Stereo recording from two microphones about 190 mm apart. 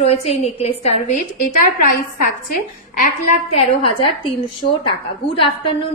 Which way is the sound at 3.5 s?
30° left (ahead or behind).